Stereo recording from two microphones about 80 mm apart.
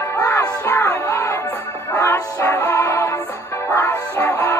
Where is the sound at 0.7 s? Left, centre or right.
Left.